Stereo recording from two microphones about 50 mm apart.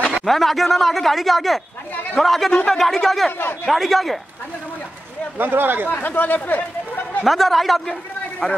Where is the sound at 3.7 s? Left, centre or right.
Centre.